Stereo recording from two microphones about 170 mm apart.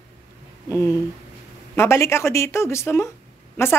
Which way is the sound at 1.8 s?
15° left (ahead or behind).